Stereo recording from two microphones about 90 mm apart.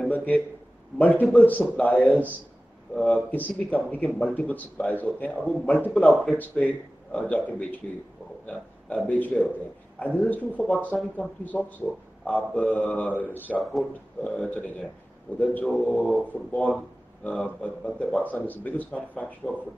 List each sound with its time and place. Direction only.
0.1 s a man's voice: 15° left (ahead or behind)
2.9 s speech: 5° left (ahead or behind)
3.3 s a man's voice: 20° left (ahead or behind)
13.6 s speech: centre (ahead or behind)
14.2 s a man's voice: 15° left (ahead or behind)